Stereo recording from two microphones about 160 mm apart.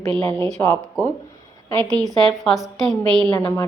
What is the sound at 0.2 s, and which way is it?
Speech, 15° left (ahead or behind).